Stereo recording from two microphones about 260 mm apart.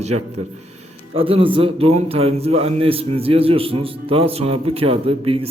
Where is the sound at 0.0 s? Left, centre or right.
Right.